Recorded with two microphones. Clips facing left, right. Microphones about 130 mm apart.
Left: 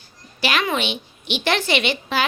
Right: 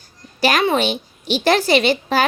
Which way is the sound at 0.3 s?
40° right (ahead or behind).